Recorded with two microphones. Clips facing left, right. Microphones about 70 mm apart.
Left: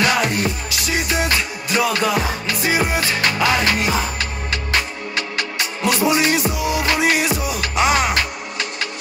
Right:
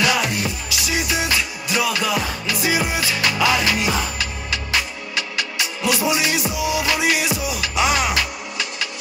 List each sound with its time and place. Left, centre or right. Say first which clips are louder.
0.0 s music: left 2 dB; left